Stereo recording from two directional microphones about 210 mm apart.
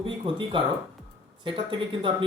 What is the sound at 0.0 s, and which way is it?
Speech, 25° right (ahead or behind).